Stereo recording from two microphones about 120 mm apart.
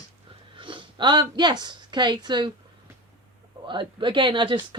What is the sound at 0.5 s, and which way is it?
Speech, 45° right (ahead or behind).